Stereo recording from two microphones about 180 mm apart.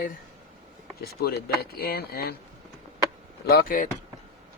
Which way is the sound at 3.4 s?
55° left (ahead or behind).